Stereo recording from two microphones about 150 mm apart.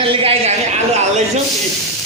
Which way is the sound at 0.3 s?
45° right (ahead or behind).